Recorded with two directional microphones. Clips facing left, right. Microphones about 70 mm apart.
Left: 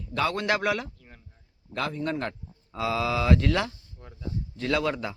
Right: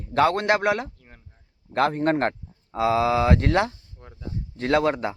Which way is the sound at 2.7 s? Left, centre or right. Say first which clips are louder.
Right 6 dB; right.